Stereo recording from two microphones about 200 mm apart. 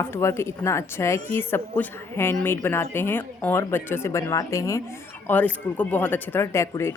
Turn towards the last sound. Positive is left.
turn(degrees=15)  # may be behind; listen again after turning